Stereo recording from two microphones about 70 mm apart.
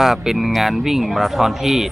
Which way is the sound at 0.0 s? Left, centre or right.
Centre.